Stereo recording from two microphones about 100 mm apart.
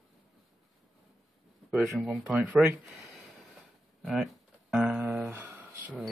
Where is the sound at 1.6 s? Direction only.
10° right (ahead or behind).